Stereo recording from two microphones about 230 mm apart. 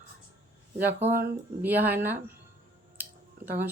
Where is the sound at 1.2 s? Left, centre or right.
Centre.